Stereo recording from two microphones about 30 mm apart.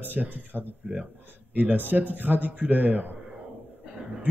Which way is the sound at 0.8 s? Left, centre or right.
Right.